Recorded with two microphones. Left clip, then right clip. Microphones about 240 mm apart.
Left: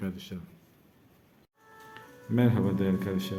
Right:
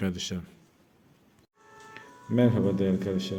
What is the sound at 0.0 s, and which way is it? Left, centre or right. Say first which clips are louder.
Speech: right 7 dB; right.